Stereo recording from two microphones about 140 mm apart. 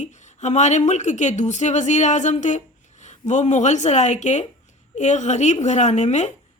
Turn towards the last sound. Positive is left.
turn(degrees=55)  # may be behind; listen again after turning